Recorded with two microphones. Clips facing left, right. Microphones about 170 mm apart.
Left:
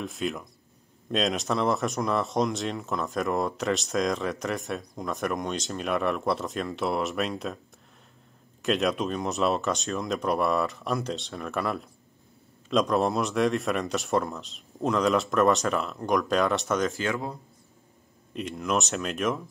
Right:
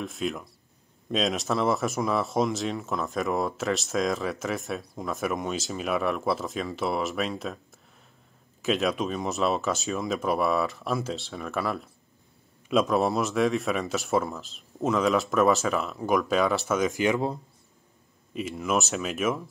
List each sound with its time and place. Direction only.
0.0 s speech: centre (ahead or behind)
8.6 s speech: centre (ahead or behind)
16.9 s speech: 15° right (ahead or behind)
18.3 s speech: 5° right (ahead or behind)